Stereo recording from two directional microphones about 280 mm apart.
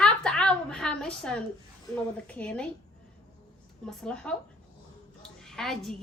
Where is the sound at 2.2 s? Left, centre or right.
Centre.